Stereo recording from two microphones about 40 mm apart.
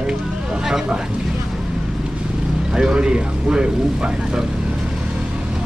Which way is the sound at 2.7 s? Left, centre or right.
Centre.